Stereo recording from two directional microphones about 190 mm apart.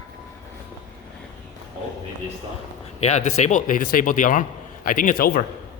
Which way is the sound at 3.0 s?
35° left (ahead or behind).